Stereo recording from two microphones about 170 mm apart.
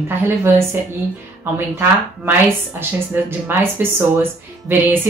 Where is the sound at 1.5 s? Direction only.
10° right (ahead or behind).